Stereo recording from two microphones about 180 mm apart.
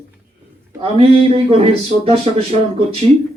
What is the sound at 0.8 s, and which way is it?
Speech, 35° right (ahead or behind).